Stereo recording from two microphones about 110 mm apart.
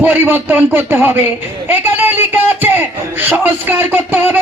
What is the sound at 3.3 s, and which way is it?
Music, 20° right (ahead or behind).